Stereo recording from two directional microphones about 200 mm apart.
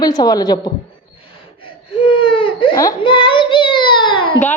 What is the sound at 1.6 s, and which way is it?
Whimper, 25° left (ahead or behind).